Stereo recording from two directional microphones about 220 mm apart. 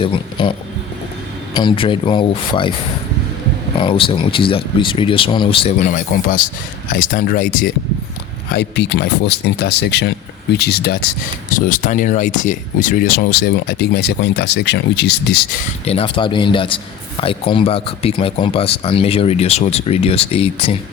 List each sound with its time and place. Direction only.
0.0 s a man's voice: 20° left (ahead or behind)
1.5 s a man's voice: 20° left (ahead or behind)
3.8 s a man's voice: 25° left (ahead or behind); by 7.7 s 40° left (ahead or behind)
8.5 s speech: 50° left (ahead or behind)
11.5 s speech: 35° left (ahead or behind)
15.9 s a man's voice: 25° left (ahead or behind)